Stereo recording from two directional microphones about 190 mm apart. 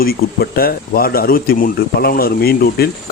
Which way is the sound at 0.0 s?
50° left (ahead or behind).